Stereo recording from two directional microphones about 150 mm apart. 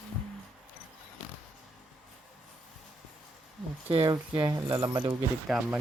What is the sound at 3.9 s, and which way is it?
Speech, 30° right (ahead or behind).